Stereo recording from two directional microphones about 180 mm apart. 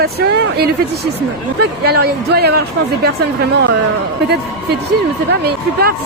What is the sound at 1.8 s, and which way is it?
Speech, 60° right (ahead or behind).